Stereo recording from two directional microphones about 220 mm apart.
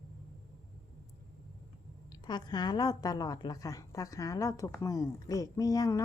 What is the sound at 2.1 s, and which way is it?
A woman's voice, 20° left (ahead or behind).